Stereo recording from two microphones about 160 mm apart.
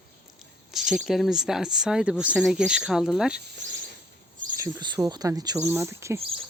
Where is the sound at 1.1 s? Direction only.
Centre (ahead or behind).